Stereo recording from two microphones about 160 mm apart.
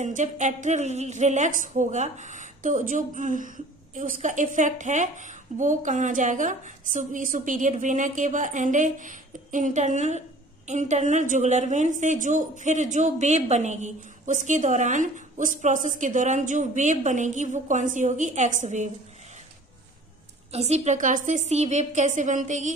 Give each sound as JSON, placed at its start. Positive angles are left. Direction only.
{"t": 0.0, "sound": "a woman's voice", "side_deg": -50}
{"t": 20.5, "sound": "a woman's voice", "side_deg": -40}